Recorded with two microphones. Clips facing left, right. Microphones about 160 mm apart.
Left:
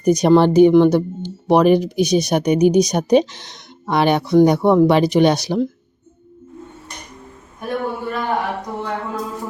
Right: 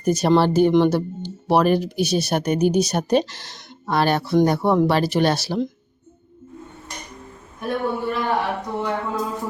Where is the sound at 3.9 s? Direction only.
15° left (ahead or behind).